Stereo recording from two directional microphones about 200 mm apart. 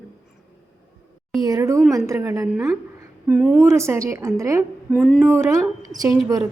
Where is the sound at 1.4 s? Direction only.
15° right (ahead or behind).